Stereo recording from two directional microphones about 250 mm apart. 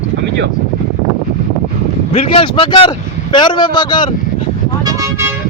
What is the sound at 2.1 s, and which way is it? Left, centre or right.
A man's voice, left.